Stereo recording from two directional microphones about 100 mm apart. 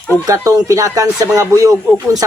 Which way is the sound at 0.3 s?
35° right (ahead or behind).